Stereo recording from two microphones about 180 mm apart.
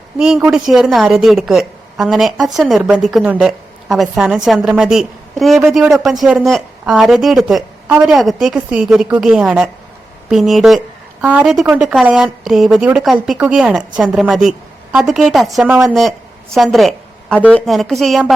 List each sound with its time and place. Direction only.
0.2 s a woman's voice: 5° right (ahead or behind)